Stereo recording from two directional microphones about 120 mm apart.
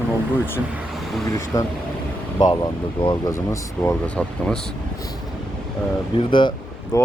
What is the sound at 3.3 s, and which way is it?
Speech, 25° left (ahead or behind).